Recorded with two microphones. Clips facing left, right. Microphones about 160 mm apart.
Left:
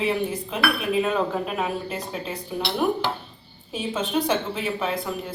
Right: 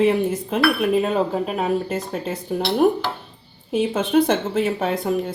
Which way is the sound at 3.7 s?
55° right (ahead or behind).